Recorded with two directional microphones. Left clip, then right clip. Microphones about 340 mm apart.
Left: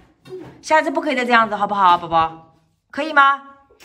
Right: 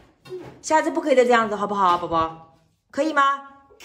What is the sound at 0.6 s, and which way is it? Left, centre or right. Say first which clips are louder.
Speech: left 4 dB; centre.